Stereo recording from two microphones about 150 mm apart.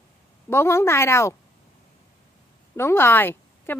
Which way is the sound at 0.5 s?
15° left (ahead or behind).